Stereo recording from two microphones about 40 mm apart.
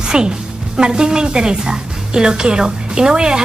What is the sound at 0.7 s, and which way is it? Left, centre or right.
A woman's voice, centre.